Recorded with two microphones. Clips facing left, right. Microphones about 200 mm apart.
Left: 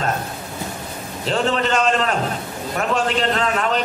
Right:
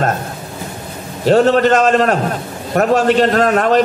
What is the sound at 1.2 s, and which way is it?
A man's voice, 40° right (ahead or behind).